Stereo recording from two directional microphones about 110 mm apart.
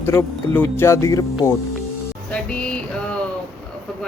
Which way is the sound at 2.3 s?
10° left (ahead or behind).